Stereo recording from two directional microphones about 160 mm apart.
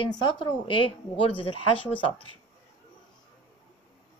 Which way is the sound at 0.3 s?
30° left (ahead or behind).